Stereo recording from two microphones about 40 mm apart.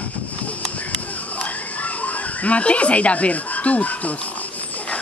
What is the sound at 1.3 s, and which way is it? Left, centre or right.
Fowl, left.